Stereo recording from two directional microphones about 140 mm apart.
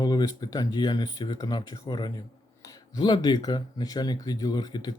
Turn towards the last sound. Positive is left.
turn(degrees=30)  # may be behind; listen again after turning